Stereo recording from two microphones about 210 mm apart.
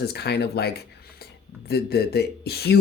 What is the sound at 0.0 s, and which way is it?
Speech, 50° left (ahead or behind).